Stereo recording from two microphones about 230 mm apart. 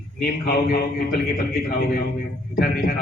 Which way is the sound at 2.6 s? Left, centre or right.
Left.